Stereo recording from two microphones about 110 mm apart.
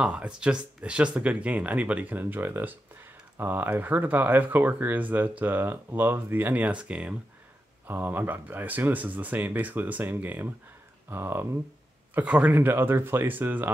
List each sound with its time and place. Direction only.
0.0 s speech: 10° right (ahead or behind)